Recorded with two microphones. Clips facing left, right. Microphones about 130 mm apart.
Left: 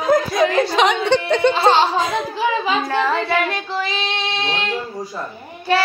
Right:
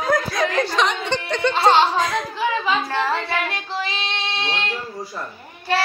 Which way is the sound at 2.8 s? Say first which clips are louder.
Left 3 dB; 45° left (ahead or behind).